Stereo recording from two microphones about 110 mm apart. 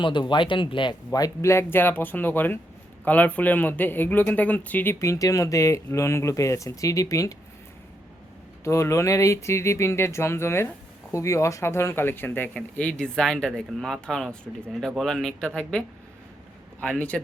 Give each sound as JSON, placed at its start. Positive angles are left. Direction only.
{"t": 0.0, "sound": "speech", "side_deg": 45}
{"t": 8.6, "sound": "speech", "side_deg": 25}
{"t": 16.8, "sound": "speech", "side_deg": 10}